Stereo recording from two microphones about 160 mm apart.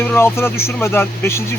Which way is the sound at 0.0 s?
15° left (ahead or behind).